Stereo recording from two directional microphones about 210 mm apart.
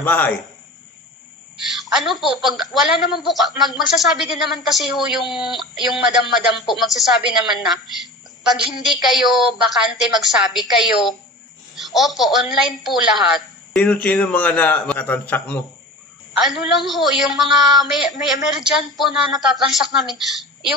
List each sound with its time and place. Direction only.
0.0 s a man's voice: 10° left (ahead or behind)
1.7 s a woman's voice: centre (ahead or behind)